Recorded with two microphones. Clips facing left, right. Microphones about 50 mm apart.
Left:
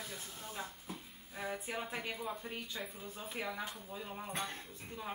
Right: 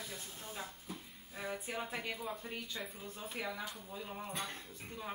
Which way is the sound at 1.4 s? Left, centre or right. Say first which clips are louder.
Left 1 dB; centre.